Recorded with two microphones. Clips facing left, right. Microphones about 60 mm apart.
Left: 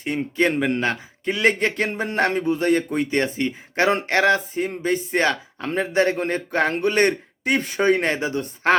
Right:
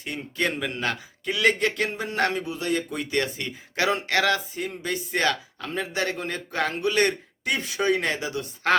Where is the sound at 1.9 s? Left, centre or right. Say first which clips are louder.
Left 5 dB; left.